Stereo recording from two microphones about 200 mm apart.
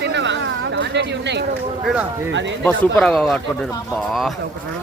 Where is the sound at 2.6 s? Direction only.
5° left (ahead or behind).